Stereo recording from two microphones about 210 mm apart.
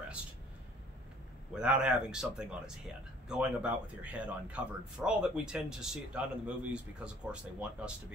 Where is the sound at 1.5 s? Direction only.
5° right (ahead or behind).